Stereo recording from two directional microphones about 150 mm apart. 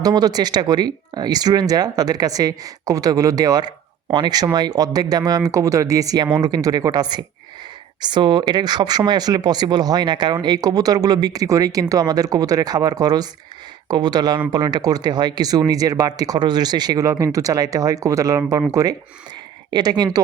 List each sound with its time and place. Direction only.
0.0 s speech: 25° right (ahead or behind)